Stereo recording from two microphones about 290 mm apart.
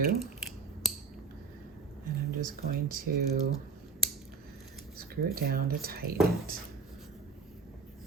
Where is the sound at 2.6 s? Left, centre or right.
Right.